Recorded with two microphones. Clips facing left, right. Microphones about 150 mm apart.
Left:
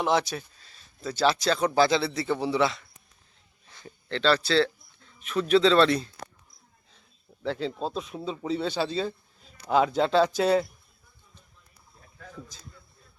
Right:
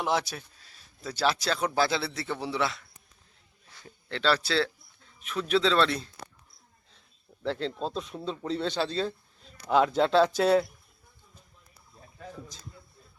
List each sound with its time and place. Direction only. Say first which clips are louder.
0.0 s speech: left 4 dB; 5° right (ahead or behind)
7.4 s speech: left 1 dB; 5° left (ahead or behind)